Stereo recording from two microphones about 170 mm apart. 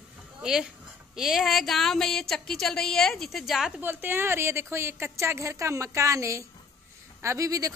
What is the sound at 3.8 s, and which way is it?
A woman's voice, 10° right (ahead or behind).